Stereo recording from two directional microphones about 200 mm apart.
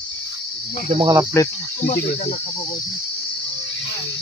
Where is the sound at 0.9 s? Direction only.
20° right (ahead or behind).